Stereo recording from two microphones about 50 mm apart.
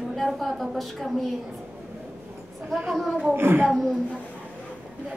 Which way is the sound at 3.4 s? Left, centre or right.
Right.